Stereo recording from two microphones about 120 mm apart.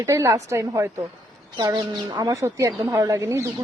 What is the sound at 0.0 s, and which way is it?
Speech, 25° right (ahead or behind).